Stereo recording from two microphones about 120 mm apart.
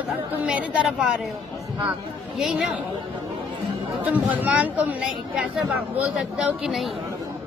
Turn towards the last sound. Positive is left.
turn(degrees=-5)  # may be behind; listen again after turning